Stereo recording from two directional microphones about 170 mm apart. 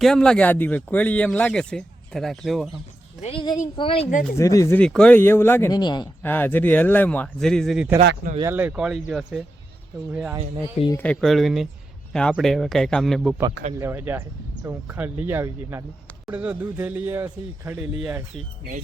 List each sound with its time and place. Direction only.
0.0 s speech: 5° left (ahead or behind)
3.2 s a woman's voice: 35° left (ahead or behind)
4.4 s speech: 20° left (ahead or behind)
4.8 s speech: 5° left (ahead or behind)
5.7 s speech: 25° left (ahead or behind)
6.2 s speech: 10° left (ahead or behind)
8.4 s speech: 15° right (ahead or behind)
10.9 s speech: 5° left (ahead or behind)
13.7 s speech: 15° right (ahead or behind)
17.9 s speech: centre (ahead or behind)